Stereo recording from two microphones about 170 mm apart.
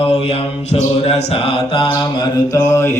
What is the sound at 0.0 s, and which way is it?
Mantra, 35° left (ahead or behind).